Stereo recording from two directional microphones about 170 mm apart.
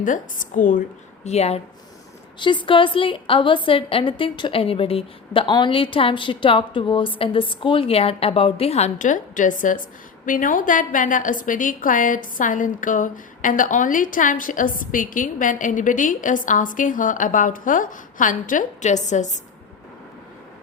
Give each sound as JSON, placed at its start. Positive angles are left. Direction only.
{"t": 0.0, "sound": "a woman's voice", "side_deg": 50}
{"t": 1.2, "sound": "a woman's voice", "side_deg": 40}
{"t": 2.4, "sound": "a woman's voice", "side_deg": 30}